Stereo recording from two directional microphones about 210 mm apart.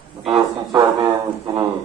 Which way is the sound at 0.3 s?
20° right (ahead or behind).